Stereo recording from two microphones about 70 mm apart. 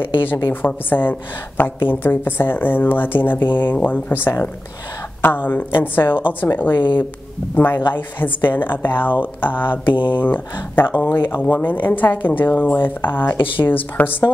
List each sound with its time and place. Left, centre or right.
0.0 s speech: left